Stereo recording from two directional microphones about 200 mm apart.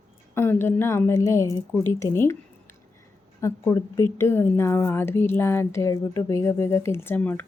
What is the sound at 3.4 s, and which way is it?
Speech, 15° left (ahead or behind).